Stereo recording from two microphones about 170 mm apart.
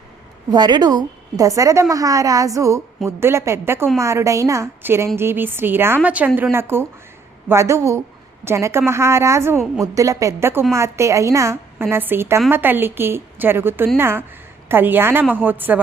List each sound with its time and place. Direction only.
0.5 s a woman's voice: 25° right (ahead or behind)